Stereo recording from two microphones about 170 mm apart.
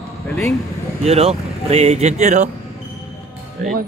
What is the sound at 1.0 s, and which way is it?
Speech, 35° right (ahead or behind).